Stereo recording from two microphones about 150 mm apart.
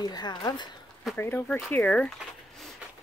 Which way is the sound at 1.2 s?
15° left (ahead or behind).